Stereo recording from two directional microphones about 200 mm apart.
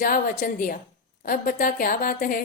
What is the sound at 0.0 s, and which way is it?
A woman's voice, 45° left (ahead or behind).